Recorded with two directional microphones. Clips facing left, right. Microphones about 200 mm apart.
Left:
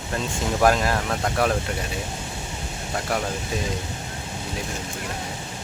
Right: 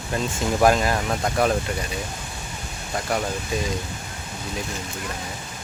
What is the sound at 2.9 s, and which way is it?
Speech, centre (ahead or behind).